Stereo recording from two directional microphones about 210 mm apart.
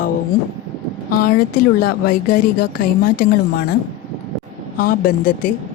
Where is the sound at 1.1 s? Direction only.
45° left (ahead or behind).